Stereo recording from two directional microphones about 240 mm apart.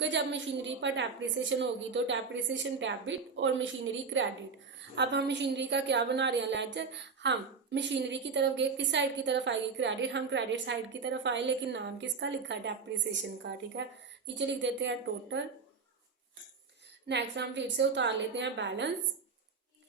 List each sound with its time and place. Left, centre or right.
0.0 s a woman's voice: right
17.1 s a woman's voice: right